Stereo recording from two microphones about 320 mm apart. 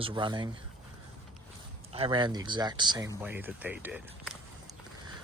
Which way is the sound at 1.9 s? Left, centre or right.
Centre.